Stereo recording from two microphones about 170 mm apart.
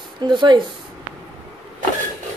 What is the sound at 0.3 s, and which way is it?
Speech, 30° right (ahead or behind).